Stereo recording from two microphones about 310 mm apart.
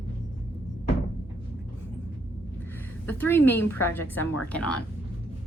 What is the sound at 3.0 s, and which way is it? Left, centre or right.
Speech, centre.